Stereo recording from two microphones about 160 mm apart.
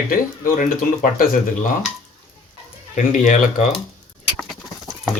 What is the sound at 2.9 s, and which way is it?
Speech, 50° left (ahead or behind).